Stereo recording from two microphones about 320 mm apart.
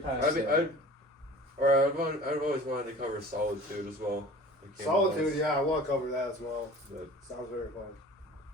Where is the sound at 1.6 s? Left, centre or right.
Right.